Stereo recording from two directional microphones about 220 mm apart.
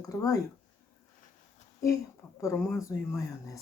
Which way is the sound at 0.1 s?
15° left (ahead or behind).